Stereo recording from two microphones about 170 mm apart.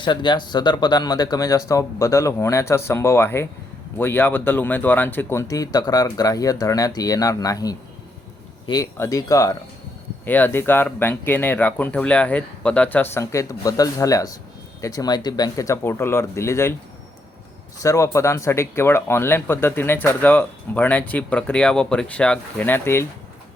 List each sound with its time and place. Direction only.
0.0 s speech: 25° left (ahead or behind)
17.7 s speech: 15° left (ahead or behind)